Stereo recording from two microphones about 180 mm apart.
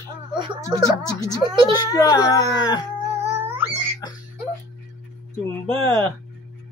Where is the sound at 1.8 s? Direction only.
20° left (ahead or behind).